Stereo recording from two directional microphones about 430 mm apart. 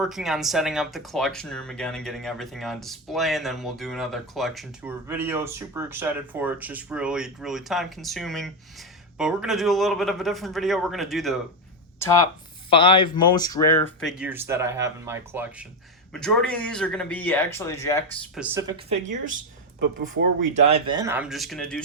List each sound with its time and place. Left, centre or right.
0.0 s speech: centre
19.1 s speech: right; by 21.8 s centre